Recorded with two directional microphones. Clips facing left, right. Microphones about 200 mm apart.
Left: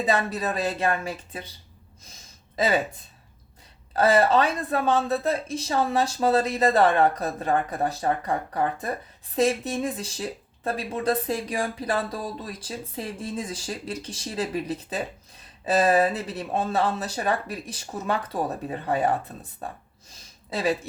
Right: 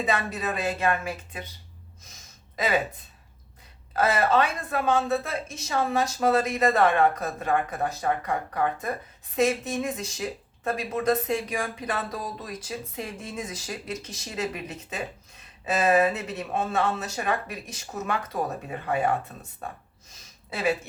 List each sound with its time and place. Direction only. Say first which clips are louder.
0.0 s speech: left 3 dB; 35° left (ahead or behind)
3.9 s speech: left 3 dB; 35° left (ahead or behind)
9.3 s speech: left 1 dB; 35° left (ahead or behind)
20.5 s speech: left 1 dB; 35° left (ahead or behind)